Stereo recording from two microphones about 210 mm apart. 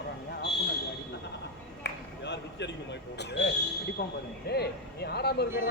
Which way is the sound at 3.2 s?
55° left (ahead or behind).